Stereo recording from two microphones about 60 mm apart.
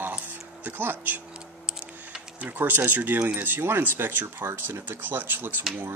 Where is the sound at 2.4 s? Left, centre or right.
Right.